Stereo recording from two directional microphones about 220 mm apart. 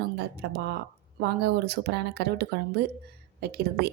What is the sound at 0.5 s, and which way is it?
Speech, 45° right (ahead or behind).